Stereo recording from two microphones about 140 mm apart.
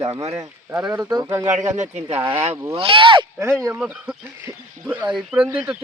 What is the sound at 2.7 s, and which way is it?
Speech, 40° right (ahead or behind).